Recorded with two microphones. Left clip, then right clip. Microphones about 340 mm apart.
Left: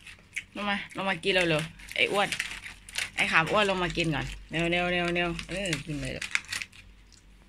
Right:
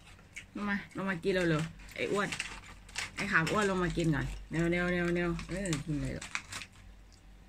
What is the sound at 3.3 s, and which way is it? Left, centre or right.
Speech, centre.